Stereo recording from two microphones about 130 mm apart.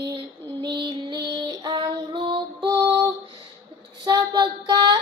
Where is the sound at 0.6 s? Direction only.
35° right (ahead or behind).